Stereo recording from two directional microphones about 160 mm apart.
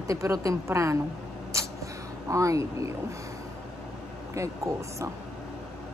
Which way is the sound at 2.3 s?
20° right (ahead or behind).